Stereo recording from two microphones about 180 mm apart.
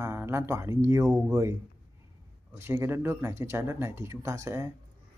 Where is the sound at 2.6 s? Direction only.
15° right (ahead or behind).